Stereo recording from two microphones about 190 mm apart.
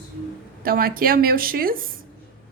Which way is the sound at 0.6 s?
50° right (ahead or behind).